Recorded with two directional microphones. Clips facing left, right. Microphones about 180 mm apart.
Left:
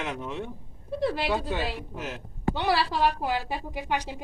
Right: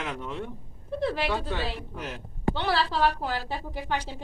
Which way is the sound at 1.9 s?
Centre (ahead or behind).